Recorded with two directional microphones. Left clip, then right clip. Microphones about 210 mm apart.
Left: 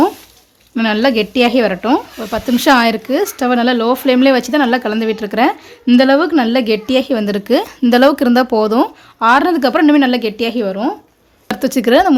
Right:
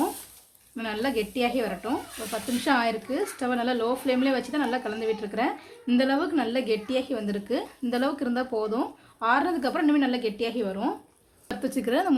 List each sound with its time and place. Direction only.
0.8 s speech: 50° left (ahead or behind)